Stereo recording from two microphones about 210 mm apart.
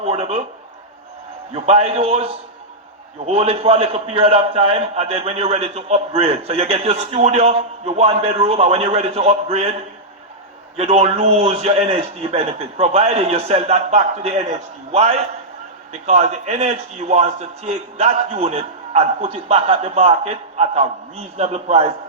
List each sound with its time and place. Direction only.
0.0 s a man's voice: 30° right (ahead or behind)
1.6 s a man's voice: 30° right (ahead or behind)
10.8 s a man's voice: 30° right (ahead or behind)